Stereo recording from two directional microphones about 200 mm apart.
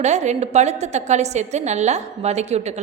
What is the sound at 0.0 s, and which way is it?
A woman's voice, 35° right (ahead or behind).